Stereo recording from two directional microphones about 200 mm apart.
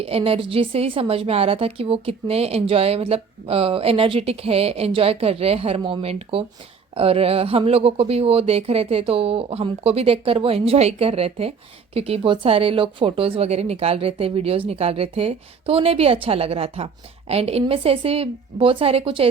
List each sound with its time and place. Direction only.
0.0 s a woman's voice: 30° right (ahead or behind)